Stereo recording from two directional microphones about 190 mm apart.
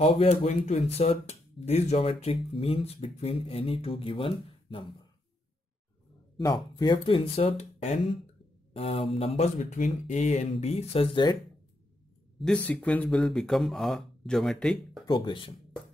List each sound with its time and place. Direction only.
0.0 s speech: 30° left (ahead or behind)
6.3 s speech: 20° left (ahead or behind)
12.6 s speech: 10° left (ahead or behind)
15.0 s speech: 25° left (ahead or behind)